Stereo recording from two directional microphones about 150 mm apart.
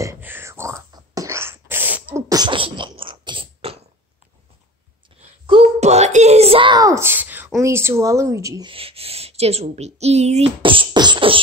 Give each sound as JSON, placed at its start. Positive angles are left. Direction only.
{"t": 0.0, "sound": "whispering", "side_deg": -15}
{"t": 0.9, "sound": "beatboxing", "side_deg": -20}
{"t": 2.2, "sound": "beatboxing", "side_deg": -25}
{"t": 5.2, "sound": "a sound", "side_deg": -45}
{"t": 7.6, "sound": "speech", "side_deg": -15}
{"t": 8.6, "sound": "speech", "side_deg": -40}